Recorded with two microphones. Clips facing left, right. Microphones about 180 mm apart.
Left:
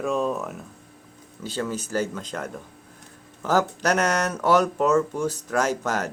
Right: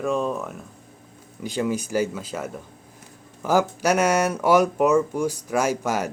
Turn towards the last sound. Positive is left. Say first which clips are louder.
# right 2 dB
turn(degrees=-10)  # may be behind; listen again after turning